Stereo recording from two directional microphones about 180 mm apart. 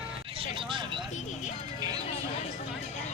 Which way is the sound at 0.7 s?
25° right (ahead or behind).